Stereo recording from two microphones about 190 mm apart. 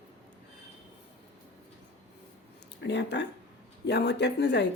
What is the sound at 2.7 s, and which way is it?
Speech, 65° left (ahead or behind).